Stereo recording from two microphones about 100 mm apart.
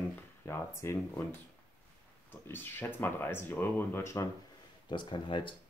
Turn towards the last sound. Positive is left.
turn(degrees=55)  # may be behind; listen again after turning